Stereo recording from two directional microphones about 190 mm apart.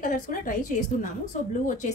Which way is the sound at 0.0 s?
45° left (ahead or behind).